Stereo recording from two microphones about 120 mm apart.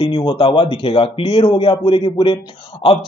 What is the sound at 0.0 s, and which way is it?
Speech, 45° left (ahead or behind).